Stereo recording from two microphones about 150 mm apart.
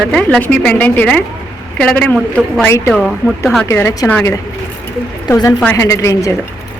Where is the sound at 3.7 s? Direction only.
15° left (ahead or behind).